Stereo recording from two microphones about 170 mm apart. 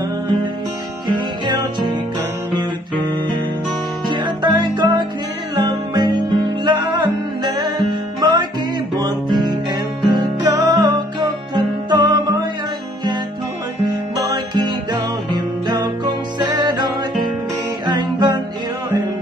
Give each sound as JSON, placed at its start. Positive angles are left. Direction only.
{"t": 1.0, "sound": "music", "side_deg": -25}
{"t": 4.1, "sound": "music", "side_deg": -25}
{"t": 13.8, "sound": "music", "side_deg": -25}